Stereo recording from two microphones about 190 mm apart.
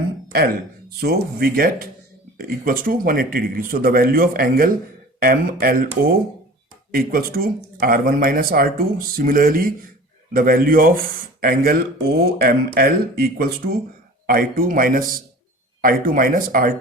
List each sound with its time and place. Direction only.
0.3 s speech: 55° right (ahead or behind)